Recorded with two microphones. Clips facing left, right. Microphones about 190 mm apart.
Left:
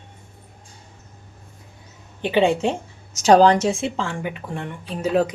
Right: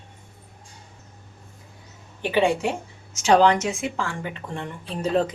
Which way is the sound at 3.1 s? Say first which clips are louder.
Left 4 dB; 40° left (ahead or behind).